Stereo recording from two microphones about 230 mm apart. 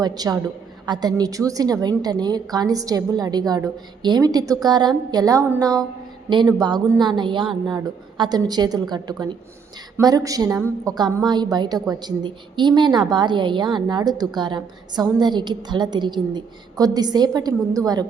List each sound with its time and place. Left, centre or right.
0.0 s a woman's voice: centre